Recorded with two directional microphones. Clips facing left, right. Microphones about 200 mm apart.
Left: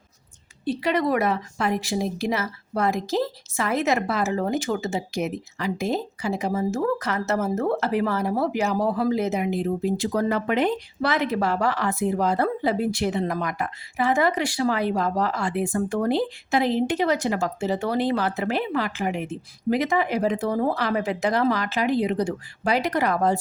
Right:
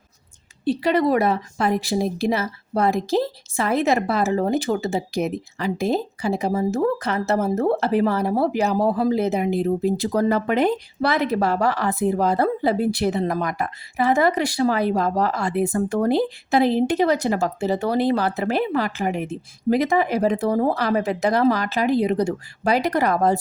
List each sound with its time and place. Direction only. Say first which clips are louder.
0.6 s a woman's voice: right 4 dB; 30° right (ahead or behind)